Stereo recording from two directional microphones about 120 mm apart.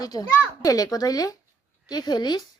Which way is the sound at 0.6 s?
30° left (ahead or behind).